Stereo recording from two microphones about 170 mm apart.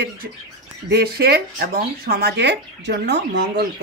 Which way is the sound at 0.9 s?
65° right (ahead or behind).